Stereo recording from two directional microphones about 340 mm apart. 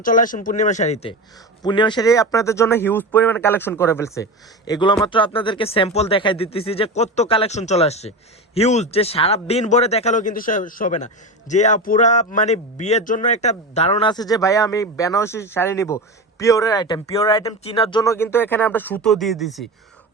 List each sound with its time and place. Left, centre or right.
0.0 s speech: left; by 19.6 s centre